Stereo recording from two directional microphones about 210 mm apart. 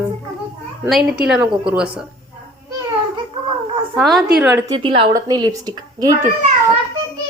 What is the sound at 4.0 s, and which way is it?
Speech, centre (ahead or behind).